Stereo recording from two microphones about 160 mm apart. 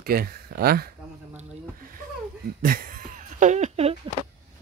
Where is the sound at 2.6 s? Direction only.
60° right (ahead or behind); by 4.0 s 40° right (ahead or behind).